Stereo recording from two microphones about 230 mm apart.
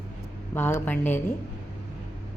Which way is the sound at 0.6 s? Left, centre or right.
Centre.